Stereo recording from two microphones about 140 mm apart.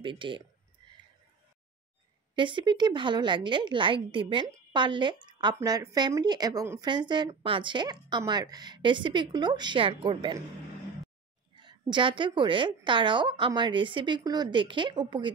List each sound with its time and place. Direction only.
0.0 s a woman's voice: 35° right (ahead or behind)
2.3 s a woman's voice: 35° right (ahead or behind)
11.5 s a woman's voice: 35° right (ahead or behind)